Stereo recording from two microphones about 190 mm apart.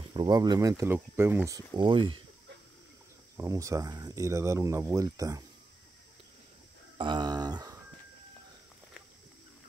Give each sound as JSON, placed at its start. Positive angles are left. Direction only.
{"t": 0.1, "sound": "speech", "side_deg": -20}
{"t": 3.3, "sound": "speech", "side_deg": -15}
{"t": 7.0, "sound": "a sound", "side_deg": -25}